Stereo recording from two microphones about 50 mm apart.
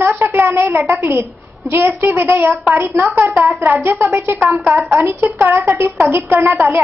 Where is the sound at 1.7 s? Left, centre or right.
Right.